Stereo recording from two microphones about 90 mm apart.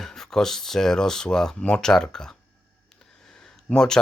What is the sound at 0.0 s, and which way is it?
Speech, 5° left (ahead or behind).